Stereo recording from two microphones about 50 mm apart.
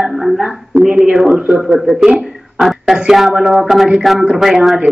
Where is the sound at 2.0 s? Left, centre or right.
Centre.